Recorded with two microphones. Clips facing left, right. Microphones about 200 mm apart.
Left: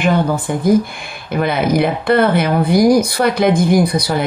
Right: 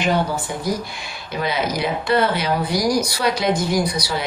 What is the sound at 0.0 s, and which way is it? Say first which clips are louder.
Speech: left 5 dB; 55° left (ahead or behind).